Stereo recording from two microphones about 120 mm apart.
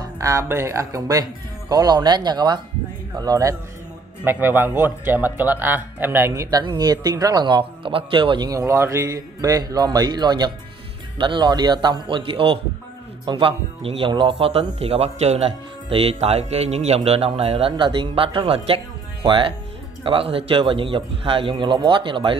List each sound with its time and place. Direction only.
0.0 s speech: 25° right (ahead or behind)
4.2 s speech: 15° right (ahead or behind)
6.6 s speech: 35° right (ahead or behind)
8.5 s speech: 25° right (ahead or behind); by 22.3 s 45° right (ahead or behind)